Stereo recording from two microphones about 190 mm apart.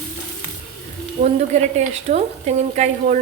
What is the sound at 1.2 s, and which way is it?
A woman's voice, 35° right (ahead or behind).